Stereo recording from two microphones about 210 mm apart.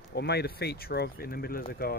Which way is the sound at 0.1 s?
50° left (ahead or behind).